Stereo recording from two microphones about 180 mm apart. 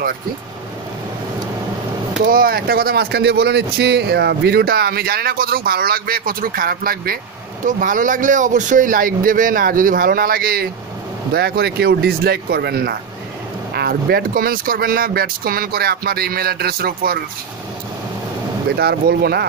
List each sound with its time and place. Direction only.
2.2 s speech: 55° right (ahead or behind)
18.8 s speech: 60° right (ahead or behind)